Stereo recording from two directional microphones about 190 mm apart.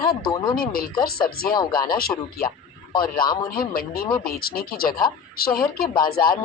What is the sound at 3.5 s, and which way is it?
Speech, 50° left (ahead or behind).